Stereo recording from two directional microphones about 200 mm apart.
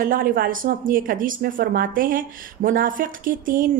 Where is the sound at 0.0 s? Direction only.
45° right (ahead or behind).